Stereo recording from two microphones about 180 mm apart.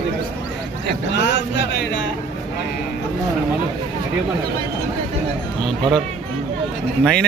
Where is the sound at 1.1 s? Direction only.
75° left (ahead or behind).